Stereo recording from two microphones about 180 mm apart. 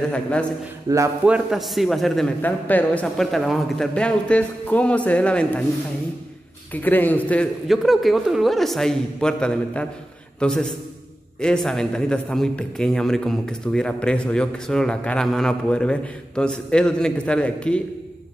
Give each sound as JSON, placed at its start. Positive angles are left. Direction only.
{"t": 0.1, "sound": "a man's voice", "side_deg": 5}
{"t": 0.8, "sound": "speech", "side_deg": -15}
{"t": 1.2, "sound": "a man's voice", "side_deg": -5}
{"t": 6.7, "sound": "a man's voice", "side_deg": 10}